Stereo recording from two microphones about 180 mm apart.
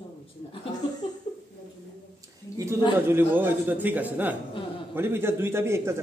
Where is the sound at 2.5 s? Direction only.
15° right (ahead or behind).